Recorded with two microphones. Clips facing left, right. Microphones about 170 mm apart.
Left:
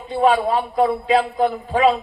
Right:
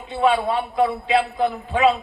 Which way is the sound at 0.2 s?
40° left (ahead or behind).